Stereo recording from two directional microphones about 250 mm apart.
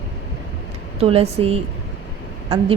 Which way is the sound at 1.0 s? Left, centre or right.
Right.